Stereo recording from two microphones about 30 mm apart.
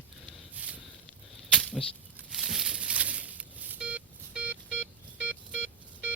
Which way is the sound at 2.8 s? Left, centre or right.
Right.